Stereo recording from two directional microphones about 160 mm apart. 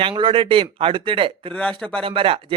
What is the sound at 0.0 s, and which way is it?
Speech, 35° right (ahead or behind).